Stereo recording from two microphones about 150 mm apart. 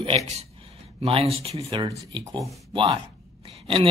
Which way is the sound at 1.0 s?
40° right (ahead or behind).